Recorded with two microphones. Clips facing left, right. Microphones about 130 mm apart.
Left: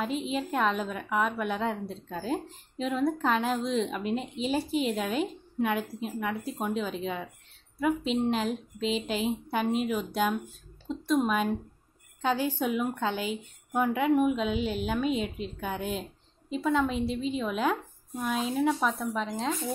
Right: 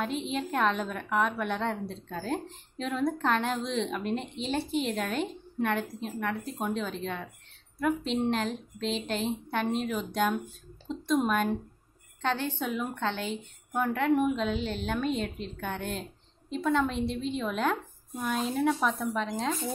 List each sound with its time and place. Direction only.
0.0 s a woman's voice: centre (ahead or behind)